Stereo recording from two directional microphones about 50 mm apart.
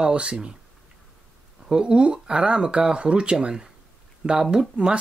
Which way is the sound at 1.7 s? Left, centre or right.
Centre.